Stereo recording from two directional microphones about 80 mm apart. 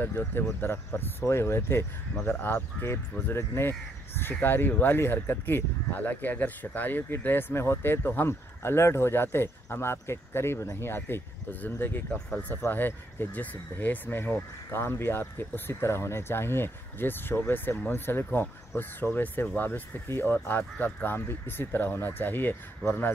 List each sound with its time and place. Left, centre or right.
0.0 s speech: left